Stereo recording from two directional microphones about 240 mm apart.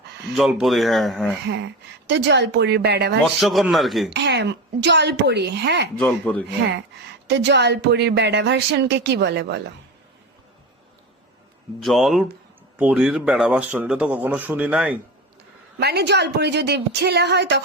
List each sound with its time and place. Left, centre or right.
0.3 s speech: centre
1.5 s a woman's voice: right
3.4 s speech: centre
4.1 s a woman's voice: right
6.0 s speech: centre
7.3 s a woman's voice: right
11.8 s speech: centre
15.8 s a woman's voice: right